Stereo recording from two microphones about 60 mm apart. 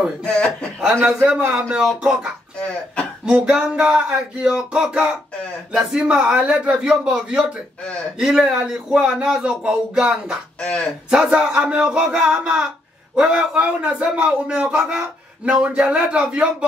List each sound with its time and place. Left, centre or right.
0.2 s a man's voice: left
1.0 s a man's voice: centre
2.6 s speech: centre
3.3 s a man's voice: centre
10.6 s speech: centre
11.1 s a man's voice: centre